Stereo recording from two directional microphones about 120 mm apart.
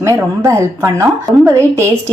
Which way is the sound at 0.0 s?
25° right (ahead or behind).